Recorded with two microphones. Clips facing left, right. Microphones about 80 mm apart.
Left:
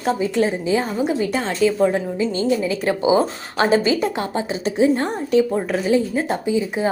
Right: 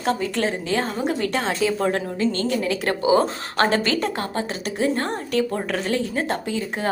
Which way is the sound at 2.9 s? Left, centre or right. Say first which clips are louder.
Left 1 dB; left.